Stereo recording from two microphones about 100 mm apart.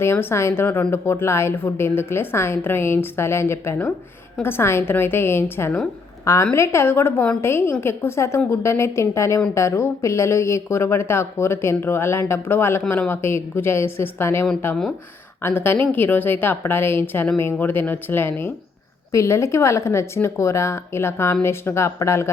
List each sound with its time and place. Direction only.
0.0 s a woman's voice: 25° left (ahead or behind)